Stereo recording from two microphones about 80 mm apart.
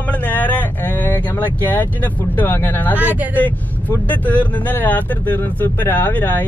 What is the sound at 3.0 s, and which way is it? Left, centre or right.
Speech, right.